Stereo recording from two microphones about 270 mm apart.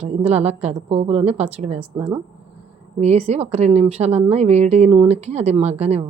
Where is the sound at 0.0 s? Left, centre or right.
Right.